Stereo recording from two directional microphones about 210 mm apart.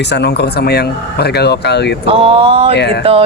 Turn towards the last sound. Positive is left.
turn(degrees=55)  # may be behind; listen again after turning